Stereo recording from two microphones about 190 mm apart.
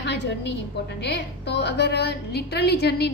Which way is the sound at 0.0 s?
65° left (ahead or behind).